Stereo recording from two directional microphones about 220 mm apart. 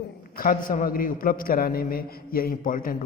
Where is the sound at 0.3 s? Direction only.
40° left (ahead or behind).